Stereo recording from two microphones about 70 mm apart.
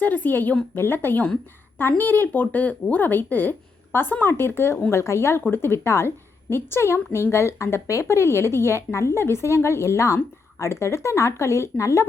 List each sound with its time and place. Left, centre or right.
0.0 s a woman's voice: left